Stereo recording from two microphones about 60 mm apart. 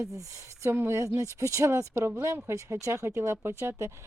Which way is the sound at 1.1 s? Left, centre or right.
Right.